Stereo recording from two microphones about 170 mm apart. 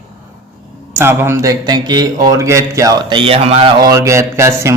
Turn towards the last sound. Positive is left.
turn(degrees=-15)  # may be behind; listen again after turning